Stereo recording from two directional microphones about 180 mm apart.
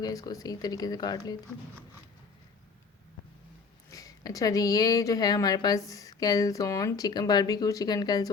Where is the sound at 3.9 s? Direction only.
20° left (ahead or behind).